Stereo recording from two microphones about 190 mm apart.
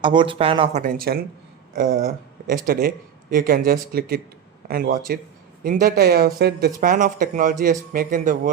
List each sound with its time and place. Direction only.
0.0 s speech: 25° right (ahead or behind)
0.8 s speech: 50° right (ahead or behind)
2.5 s speech: 50° right (ahead or behind)